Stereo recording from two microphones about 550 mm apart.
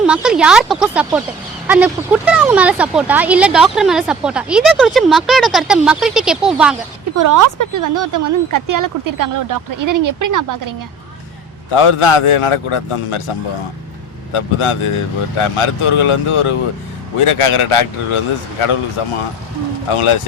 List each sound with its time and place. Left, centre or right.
0.0 s speech: centre
7.2 s speech: right
11.7 s a man's voice: left
14.3 s a man's voice: left